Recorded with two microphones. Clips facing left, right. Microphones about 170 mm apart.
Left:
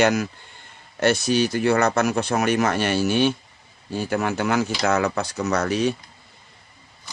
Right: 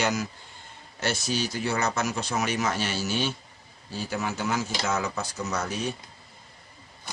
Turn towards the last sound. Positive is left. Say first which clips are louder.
# left 8 dB
turn(degrees=75)  # may be behind; listen again after turning